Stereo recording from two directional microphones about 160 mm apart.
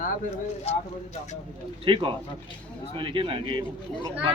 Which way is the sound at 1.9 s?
30° right (ahead or behind).